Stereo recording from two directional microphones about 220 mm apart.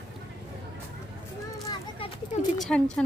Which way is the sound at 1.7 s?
25° left (ahead or behind).